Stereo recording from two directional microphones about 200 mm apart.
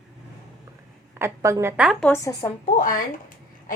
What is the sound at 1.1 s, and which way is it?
Speech, 15° right (ahead or behind).